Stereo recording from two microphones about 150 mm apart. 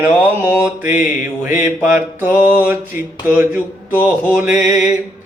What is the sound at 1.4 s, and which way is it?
Mantra, 15° right (ahead or behind).